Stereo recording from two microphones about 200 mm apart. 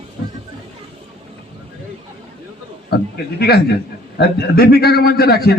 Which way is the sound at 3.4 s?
55° left (ahead or behind).